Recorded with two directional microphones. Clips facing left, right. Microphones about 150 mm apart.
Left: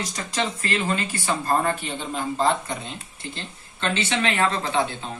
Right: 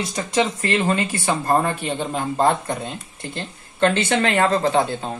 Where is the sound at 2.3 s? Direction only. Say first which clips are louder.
Right 4 dB; 50° right (ahead or behind).